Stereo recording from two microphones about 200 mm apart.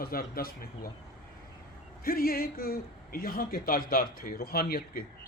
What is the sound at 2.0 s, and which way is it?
A man's voice, 45° left (ahead or behind).